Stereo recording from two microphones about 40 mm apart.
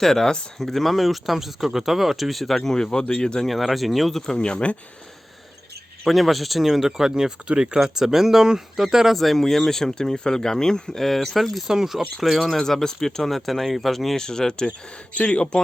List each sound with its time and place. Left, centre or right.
0.0 s speech: centre
2.8 s speech: centre
3.4 s speech: centre
4.4 s speech: left
6.1 s speech: centre
9.1 s speech: centre
11.0 s speech: centre
11.7 s speech: centre
14.2 s speech: centre